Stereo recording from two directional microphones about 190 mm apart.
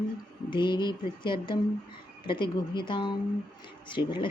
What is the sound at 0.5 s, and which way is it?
Speech, 25° left (ahead or behind).